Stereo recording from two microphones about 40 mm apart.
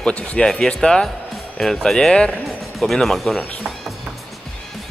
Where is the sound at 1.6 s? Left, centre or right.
Centre.